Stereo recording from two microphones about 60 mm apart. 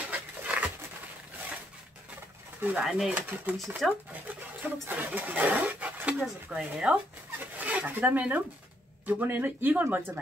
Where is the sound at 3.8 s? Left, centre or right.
Centre.